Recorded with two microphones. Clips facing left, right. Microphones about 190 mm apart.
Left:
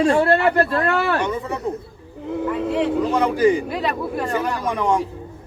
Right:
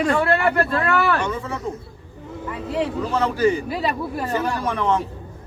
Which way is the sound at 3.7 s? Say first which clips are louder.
Left 1 dB; 5° right (ahead or behind).